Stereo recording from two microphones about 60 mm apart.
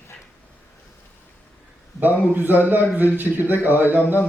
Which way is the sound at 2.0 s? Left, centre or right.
Right.